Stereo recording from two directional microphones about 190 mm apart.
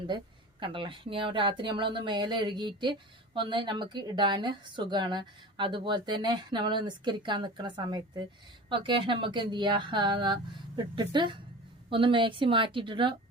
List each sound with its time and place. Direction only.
0.6 s speech: 25° right (ahead or behind)